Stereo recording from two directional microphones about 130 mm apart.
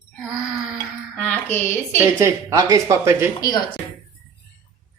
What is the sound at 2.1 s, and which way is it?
Speech, 20° right (ahead or behind).